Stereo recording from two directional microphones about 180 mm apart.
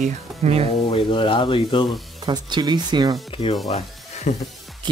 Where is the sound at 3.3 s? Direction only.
30° left (ahead or behind).